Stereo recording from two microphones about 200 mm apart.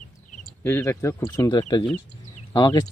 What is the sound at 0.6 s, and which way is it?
A man's voice, 10° left (ahead or behind).